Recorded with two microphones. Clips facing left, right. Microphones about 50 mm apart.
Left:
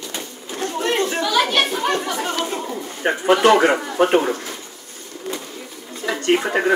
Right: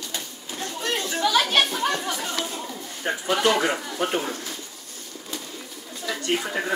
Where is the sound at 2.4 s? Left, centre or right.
Left.